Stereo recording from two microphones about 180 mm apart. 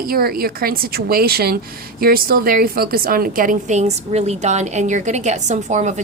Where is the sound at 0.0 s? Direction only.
55° right (ahead or behind).